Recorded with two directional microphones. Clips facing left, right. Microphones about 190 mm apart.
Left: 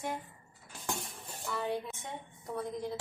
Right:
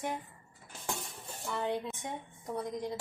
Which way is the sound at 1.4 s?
20° right (ahead or behind).